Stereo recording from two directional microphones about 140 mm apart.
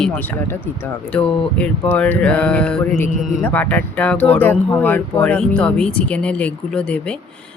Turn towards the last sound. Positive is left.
turn(degrees=10)  # may be behind; listen again after turning